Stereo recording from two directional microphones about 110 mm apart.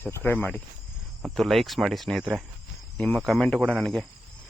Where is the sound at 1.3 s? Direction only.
Centre (ahead or behind).